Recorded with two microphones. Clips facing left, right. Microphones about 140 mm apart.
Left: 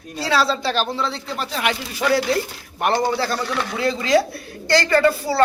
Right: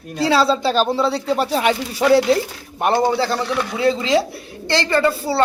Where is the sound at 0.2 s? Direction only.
25° right (ahead or behind).